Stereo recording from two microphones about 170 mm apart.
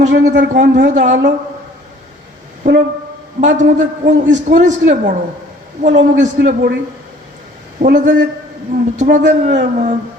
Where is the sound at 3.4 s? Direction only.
45° right (ahead or behind).